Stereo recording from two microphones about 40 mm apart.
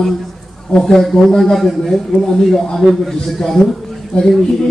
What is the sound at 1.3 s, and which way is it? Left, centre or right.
A man's voice, centre.